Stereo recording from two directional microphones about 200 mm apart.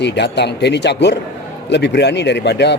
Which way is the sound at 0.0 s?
60° left (ahead or behind).